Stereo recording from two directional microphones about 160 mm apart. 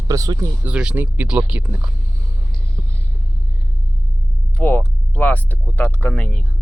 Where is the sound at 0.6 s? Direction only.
5° right (ahead or behind).